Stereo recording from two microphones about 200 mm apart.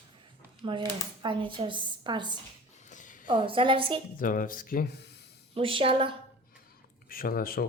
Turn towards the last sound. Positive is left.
turn(degrees=45)  # may be behind; listen again after turning